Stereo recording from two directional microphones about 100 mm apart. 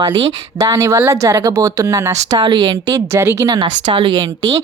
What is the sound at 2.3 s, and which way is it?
Speech, 55° right (ahead or behind).